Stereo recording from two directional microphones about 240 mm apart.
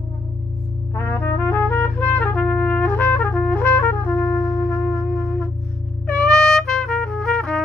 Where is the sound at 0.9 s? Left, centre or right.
Centre.